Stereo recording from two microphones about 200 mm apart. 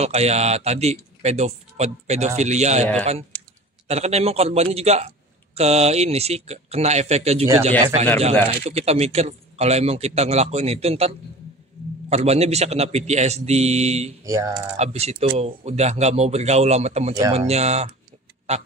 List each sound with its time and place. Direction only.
0.0 s a man's voice: 35° right (ahead or behind)
8.5 s a man's voice: 30° right (ahead or behind)
14.2 s typing: 15° right (ahead or behind)
14.8 s a man's voice: 30° right (ahead or behind)